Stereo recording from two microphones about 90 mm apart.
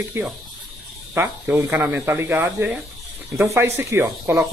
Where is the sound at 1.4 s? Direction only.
20° right (ahead or behind).